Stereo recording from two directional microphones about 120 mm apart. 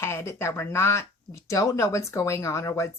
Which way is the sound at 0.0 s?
20° left (ahead or behind).